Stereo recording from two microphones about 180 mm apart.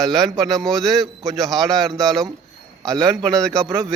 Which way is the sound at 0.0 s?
Centre (ahead or behind).